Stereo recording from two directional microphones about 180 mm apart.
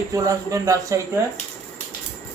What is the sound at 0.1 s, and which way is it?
Speech, 20° right (ahead or behind).